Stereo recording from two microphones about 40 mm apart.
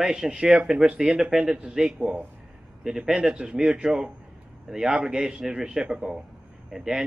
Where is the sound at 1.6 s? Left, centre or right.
Right.